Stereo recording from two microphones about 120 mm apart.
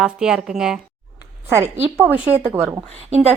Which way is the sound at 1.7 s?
65° right (ahead or behind).